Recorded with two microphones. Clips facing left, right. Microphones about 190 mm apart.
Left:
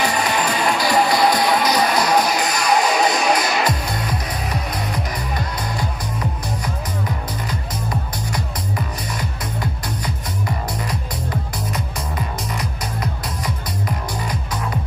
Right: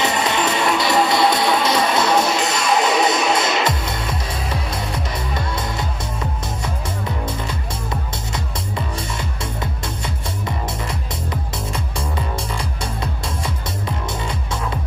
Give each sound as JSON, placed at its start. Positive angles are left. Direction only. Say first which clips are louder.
{"t": 0.0, "sound": "music", "louder": "right 1 dB", "side_deg": -25}
{"t": 7.4, "sound": "music", "louder": "left 1 dB", "side_deg": -25}
{"t": 13.8, "sound": "music", "louder": "even", "side_deg": -25}